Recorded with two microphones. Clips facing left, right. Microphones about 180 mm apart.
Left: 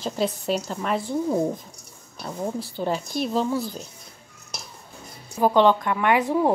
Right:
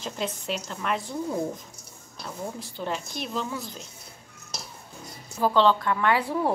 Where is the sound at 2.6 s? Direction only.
35° left (ahead or behind).